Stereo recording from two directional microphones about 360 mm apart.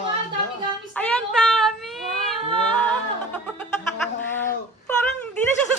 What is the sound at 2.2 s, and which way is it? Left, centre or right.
Singing, centre.